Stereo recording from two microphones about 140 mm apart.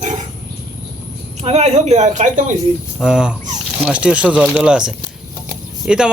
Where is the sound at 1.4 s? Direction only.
50° right (ahead or behind).